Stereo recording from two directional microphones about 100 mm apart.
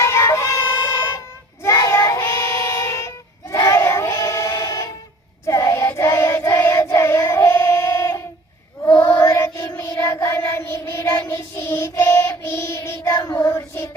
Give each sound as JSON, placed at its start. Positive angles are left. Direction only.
{"t": 0.0, "sound": "music", "side_deg": 30}
{"t": 1.6, "sound": "child singing", "side_deg": 30}
{"t": 8.8, "sound": "chant", "side_deg": 25}
{"t": 9.6, "sound": "child singing", "side_deg": 25}